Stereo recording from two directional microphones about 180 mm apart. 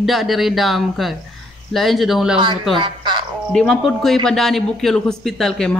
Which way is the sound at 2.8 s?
25° right (ahead or behind).